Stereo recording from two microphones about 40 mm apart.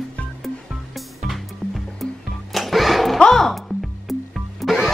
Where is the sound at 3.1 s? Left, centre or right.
Centre.